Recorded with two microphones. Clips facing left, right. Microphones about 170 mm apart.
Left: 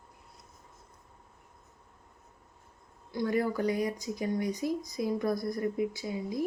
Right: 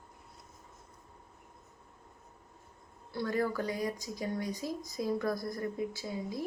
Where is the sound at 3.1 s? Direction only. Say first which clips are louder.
Left 3 dB; 15° left (ahead or behind).